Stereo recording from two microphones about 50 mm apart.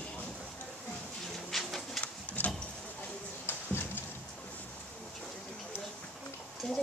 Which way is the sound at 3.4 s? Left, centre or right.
Left.